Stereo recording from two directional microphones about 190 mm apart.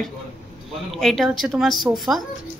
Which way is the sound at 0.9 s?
Centre (ahead or behind).